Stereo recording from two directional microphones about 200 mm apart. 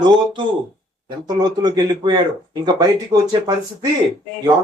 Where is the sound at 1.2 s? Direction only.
20° right (ahead or behind).